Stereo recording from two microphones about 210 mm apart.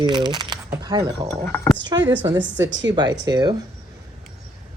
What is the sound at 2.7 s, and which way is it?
Speech, 60° right (ahead or behind).